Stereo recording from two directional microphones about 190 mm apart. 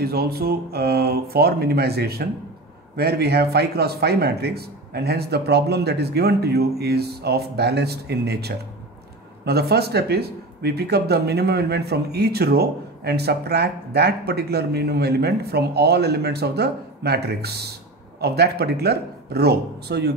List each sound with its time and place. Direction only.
0.0 s speech: 55° right (ahead or behind)